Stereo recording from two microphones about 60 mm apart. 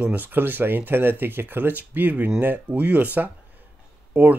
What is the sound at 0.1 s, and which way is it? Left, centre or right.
Speech, right.